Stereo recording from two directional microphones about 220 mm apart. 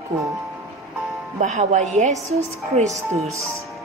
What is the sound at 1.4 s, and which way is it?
A woman's voice, 35° right (ahead or behind).